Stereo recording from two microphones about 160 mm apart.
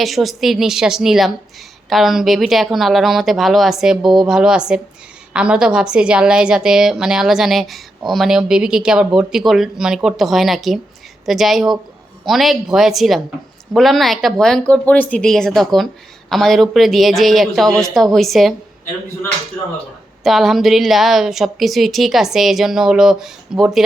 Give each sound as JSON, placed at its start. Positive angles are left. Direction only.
{"t": 0.0, "sound": "a woman's voice", "side_deg": 0}
{"t": 20.2, "sound": "a woman's voice", "side_deg": 0}